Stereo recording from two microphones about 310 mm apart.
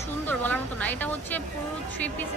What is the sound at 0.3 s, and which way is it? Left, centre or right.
Speech, centre.